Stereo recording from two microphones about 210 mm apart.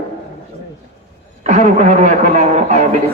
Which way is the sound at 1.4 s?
35° right (ahead or behind).